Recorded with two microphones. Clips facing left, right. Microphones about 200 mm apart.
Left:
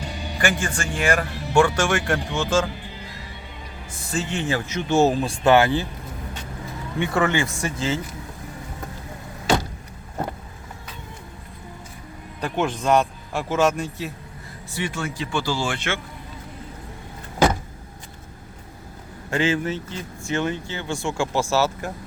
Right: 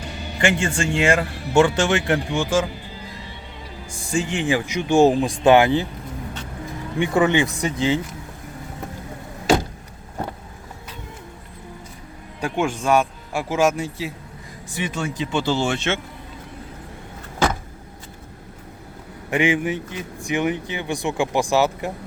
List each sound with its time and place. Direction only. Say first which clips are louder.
0.3 s speech: right 4 dB; 25° right (ahead or behind)
4.1 s speech: right 4 dB; 15° right (ahead or behind)
7.0 s speech: right 4 dB; 15° right (ahead or behind)
12.4 s speech: right 1 dB; 10° right (ahead or behind)
19.3 s speech: right 2 dB; 15° right (ahead or behind)